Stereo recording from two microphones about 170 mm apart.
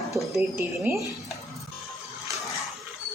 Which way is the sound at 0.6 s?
15° right (ahead or behind).